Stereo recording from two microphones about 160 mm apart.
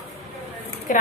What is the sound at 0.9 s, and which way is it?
Speech, 55° left (ahead or behind).